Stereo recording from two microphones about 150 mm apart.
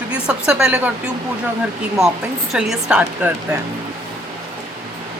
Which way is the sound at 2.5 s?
5° right (ahead or behind).